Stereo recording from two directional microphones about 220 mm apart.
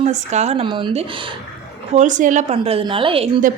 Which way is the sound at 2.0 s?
35° right (ahead or behind).